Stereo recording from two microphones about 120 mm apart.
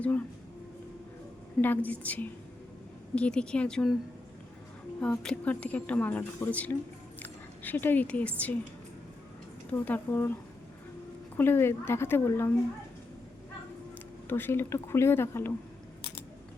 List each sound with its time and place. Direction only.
1.6 s speech: 15° left (ahead or behind)
4.9 s speech: 10° left (ahead or behind)
9.6 s speech: 10° left (ahead or behind)
11.3 s a woman's voice: 20° left (ahead or behind)
14.3 s a woman's voice: 15° left (ahead or behind)